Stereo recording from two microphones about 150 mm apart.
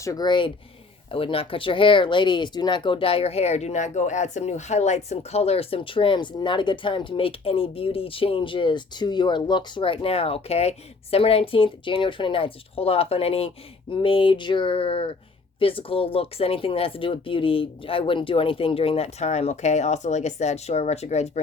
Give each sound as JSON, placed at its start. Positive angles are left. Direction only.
{"t": 0.0, "sound": "speech", "side_deg": 25}